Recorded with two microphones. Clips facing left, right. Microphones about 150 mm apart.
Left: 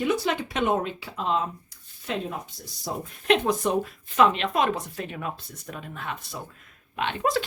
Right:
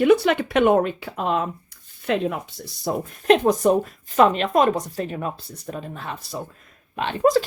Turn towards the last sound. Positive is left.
turn(degrees=-35)  # may be behind; listen again after turning